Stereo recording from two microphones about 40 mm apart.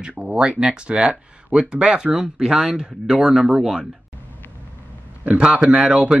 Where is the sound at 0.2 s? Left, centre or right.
Right.